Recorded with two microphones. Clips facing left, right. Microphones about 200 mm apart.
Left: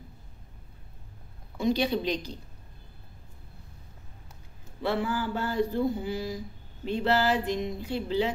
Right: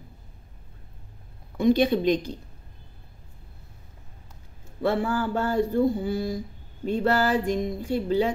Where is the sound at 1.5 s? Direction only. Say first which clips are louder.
Right 6 dB; 50° right (ahead or behind).